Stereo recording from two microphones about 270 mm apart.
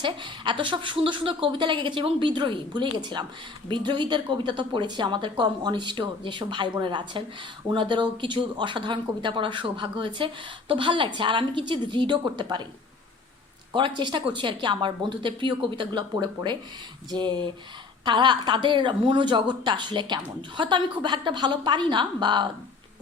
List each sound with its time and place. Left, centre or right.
0.0 s a woman's voice: centre
14.0 s a woman's voice: centre